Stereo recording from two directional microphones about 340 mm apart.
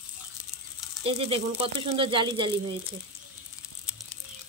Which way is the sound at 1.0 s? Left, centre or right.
Centre.